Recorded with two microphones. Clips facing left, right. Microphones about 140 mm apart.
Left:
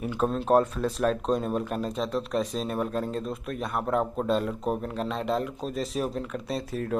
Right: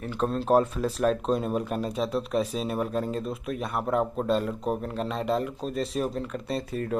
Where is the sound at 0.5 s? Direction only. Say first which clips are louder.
Even; centre (ahead or behind).